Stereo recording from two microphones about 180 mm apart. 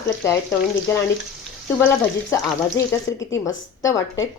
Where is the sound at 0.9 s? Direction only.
15° left (ahead or behind).